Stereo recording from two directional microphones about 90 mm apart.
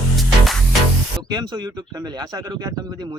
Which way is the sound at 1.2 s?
50° right (ahead or behind).